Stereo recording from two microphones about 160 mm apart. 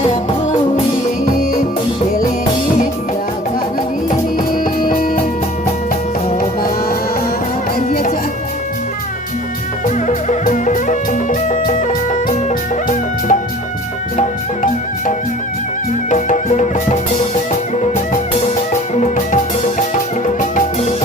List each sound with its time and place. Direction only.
1.2 s music: 65° left (ahead or behind)
4.5 s music: 60° left (ahead or behind)
7.9 s music: 65° left (ahead or behind)
9.8 s music: 55° left (ahead or behind)
18.7 s music: 50° left (ahead or behind)